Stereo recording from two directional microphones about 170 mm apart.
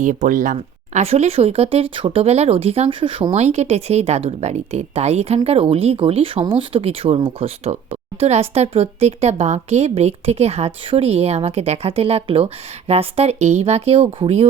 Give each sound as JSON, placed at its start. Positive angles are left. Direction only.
{"t": 0.0, "sound": "speech", "side_deg": -50}